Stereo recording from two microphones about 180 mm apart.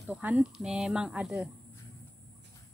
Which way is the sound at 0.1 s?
5° right (ahead or behind).